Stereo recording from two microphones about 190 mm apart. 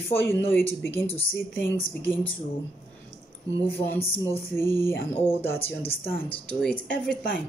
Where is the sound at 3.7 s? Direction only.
10° left (ahead or behind).